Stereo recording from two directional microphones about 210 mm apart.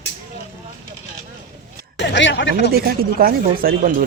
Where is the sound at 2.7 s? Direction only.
45° right (ahead or behind).